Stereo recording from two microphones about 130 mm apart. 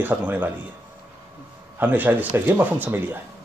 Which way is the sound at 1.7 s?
15° right (ahead or behind).